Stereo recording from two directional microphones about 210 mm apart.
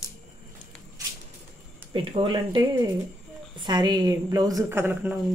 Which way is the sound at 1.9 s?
25° right (ahead or behind).